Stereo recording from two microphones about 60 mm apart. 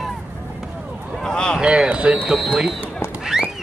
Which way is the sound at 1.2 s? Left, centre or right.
Centre.